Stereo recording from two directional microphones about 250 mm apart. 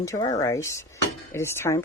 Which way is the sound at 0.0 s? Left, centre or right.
Centre.